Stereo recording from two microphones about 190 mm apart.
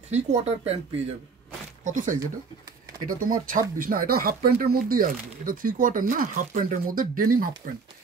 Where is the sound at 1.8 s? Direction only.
45° right (ahead or behind).